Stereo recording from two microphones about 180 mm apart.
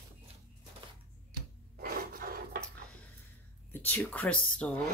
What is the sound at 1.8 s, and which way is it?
Wood, 55° right (ahead or behind).